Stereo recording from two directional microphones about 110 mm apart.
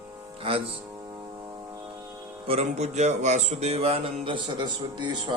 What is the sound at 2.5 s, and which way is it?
Speech, 75° right (ahead or behind).